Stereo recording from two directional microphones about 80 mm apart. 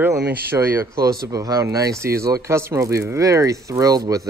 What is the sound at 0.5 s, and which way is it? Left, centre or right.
Speech, right.